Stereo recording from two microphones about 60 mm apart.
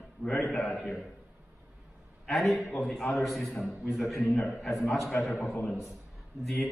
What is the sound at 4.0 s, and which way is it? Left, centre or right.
Speech, centre.